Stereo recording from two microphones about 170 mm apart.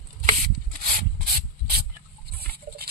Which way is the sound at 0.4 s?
55° right (ahead or behind).